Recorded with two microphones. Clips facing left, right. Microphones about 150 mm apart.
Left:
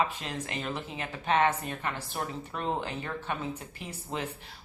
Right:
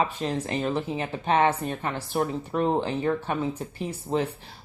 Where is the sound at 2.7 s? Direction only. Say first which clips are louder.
Right 9 dB; 30° right (ahead or behind).